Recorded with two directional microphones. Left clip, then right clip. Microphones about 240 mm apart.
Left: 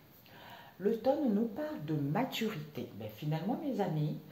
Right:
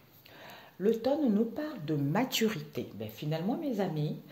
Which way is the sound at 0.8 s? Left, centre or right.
Right.